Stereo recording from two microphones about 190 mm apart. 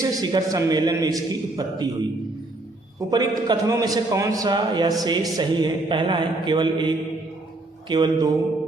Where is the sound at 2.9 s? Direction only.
20° right (ahead or behind).